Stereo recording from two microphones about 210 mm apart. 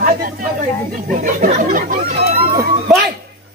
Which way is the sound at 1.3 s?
40° right (ahead or behind).